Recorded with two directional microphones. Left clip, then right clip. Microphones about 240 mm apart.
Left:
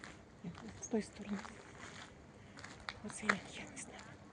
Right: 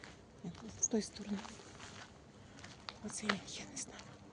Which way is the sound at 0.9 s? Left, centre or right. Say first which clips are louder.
Right 1 dB; centre.